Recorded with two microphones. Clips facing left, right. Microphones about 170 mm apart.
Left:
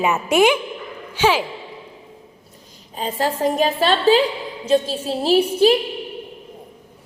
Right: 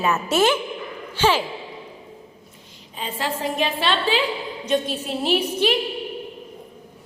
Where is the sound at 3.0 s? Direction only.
40° left (ahead or behind).